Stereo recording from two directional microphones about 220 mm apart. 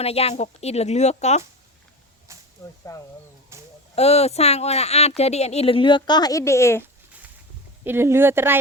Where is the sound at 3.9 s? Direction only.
30° left (ahead or behind); by 6.8 s 10° left (ahead or behind).